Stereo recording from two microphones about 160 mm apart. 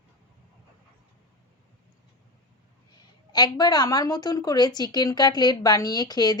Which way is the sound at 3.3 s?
25° left (ahead or behind).